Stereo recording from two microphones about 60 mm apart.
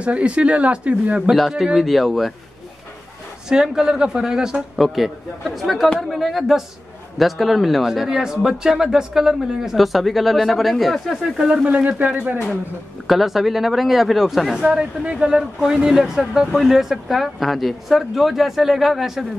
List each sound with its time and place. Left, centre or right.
0.0 s speech: centre
1.3 s speech: centre
3.4 s speech: centre
11.6 s speech: right
13.0 s speech: centre
14.5 s speech: centre